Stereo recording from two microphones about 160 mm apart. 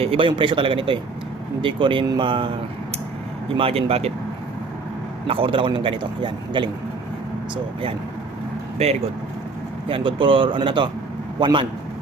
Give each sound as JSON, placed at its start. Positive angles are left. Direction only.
{"t": 0.0, "sound": "a man's voice", "side_deg": -35}
{"t": 3.6, "sound": "a man's voice", "side_deg": -35}
{"t": 5.3, "sound": "a man's voice", "side_deg": -35}
{"t": 9.9, "sound": "a man's voice", "side_deg": -30}